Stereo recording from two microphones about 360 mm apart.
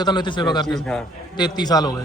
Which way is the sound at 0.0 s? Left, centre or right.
Centre.